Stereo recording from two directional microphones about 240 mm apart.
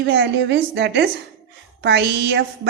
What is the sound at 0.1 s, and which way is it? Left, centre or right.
A woman's voice, right.